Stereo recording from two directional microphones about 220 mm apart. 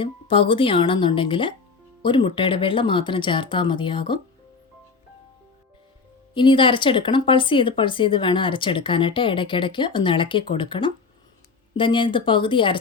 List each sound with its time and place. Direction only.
0.0 s speech: 25° left (ahead or behind)
6.3 s speech: 20° left (ahead or behind)